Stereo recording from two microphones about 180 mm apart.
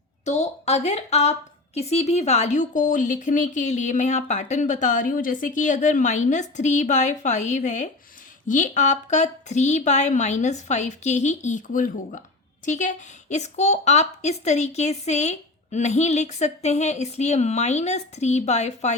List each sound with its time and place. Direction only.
0.3 s a woman's voice: 40° left (ahead or behind)